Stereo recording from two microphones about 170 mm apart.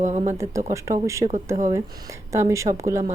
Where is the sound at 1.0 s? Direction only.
15° right (ahead or behind).